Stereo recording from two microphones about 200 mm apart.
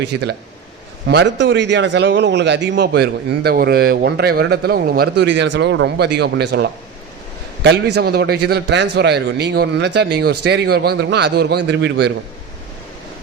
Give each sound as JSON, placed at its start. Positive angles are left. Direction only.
{"t": 1.0, "sound": "a man's voice", "side_deg": -60}